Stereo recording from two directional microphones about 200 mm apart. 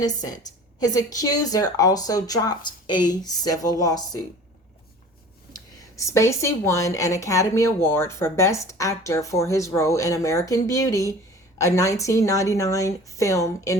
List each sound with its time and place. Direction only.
0.0 s a woman's voice: 20° left (ahead or behind)
5.5 s a woman's voice: 15° left (ahead or behind)